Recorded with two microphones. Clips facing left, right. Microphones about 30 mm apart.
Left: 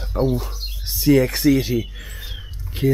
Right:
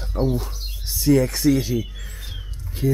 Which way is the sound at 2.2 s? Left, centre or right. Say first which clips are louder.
Left 3 dB; centre.